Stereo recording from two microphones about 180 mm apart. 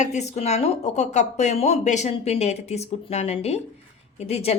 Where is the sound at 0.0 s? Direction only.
40° left (ahead or behind).